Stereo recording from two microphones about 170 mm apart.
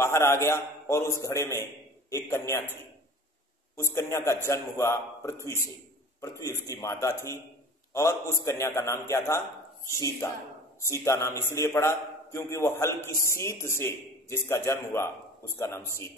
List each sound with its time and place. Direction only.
0.0 s a man's voice: 15° left (ahead or behind)